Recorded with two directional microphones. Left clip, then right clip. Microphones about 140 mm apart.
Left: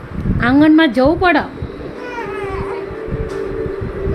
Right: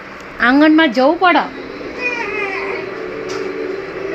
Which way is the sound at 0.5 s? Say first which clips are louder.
Left 2 dB; 40° left (ahead or behind).